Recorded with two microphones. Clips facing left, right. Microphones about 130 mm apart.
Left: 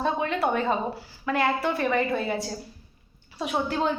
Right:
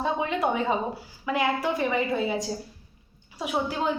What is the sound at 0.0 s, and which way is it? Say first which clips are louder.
A woman's voice: left 1 dB; 15° right (ahead or behind).